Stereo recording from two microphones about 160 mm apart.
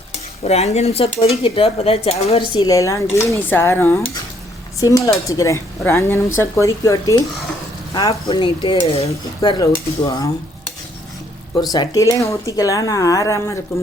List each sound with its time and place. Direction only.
0.4 s speech: 45° left (ahead or behind); by 10.2 s 25° left (ahead or behind)
11.7 s speech: 25° left (ahead or behind)